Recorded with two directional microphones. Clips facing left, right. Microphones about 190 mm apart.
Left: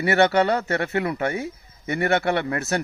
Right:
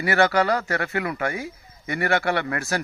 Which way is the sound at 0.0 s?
25° left (ahead or behind).